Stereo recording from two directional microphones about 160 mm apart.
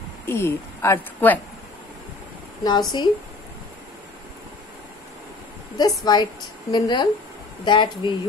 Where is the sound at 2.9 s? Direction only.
25° left (ahead or behind).